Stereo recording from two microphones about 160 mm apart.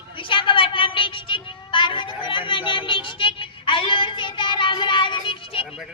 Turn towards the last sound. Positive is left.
turn(degrees=35)  # may be behind; listen again after turning